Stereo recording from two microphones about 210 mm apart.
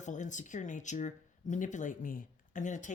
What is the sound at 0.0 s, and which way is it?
Speech, 35° left (ahead or behind).